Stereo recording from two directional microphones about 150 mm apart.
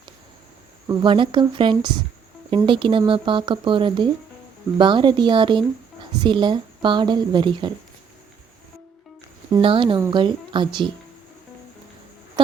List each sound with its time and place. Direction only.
0.9 s a woman's voice: 30° right (ahead or behind)
9.6 s a woman's voice: 35° right (ahead or behind)